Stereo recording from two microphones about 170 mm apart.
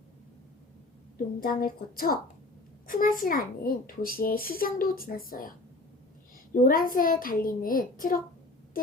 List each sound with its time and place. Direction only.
1.4 s a child's voice: 55° left (ahead or behind)